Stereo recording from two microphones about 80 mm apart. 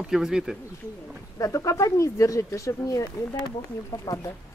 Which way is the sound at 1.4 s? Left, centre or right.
Left.